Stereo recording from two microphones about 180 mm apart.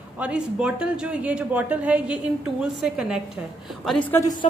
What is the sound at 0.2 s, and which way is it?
A woman's voice, 5° right (ahead or behind).